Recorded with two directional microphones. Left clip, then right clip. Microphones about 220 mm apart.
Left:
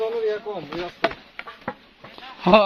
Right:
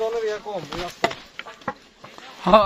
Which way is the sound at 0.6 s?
35° right (ahead or behind).